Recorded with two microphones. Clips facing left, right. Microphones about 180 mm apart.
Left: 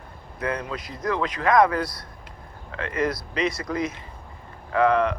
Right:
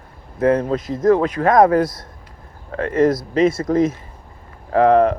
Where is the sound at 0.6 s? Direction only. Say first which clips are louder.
Right 13 dB; 45° right (ahead or behind).